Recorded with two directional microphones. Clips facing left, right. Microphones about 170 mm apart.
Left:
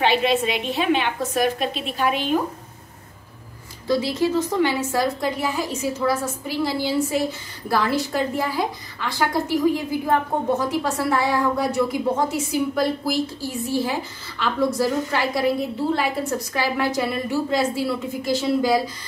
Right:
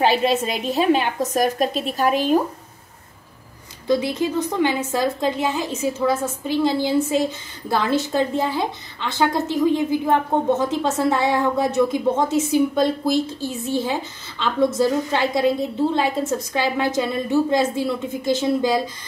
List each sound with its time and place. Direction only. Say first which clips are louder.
0.0 s a woman's voice: right 1 dB; 40° right (ahead or behind)
3.8 s a woman's voice: right 1 dB; 20° right (ahead or behind)